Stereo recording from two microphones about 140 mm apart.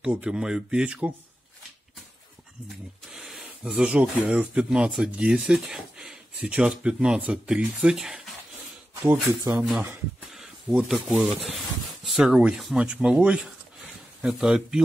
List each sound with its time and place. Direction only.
0.0 s speech: 5° right (ahead or behind)
3.1 s speech: 5° right (ahead or behind)
9.3 s speech: 25° right (ahead or behind)
9.6 s speech: 10° right (ahead or behind)
10.9 s speech: centre (ahead or behind)